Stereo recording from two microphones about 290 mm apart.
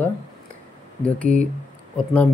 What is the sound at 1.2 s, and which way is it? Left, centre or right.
Speech, right.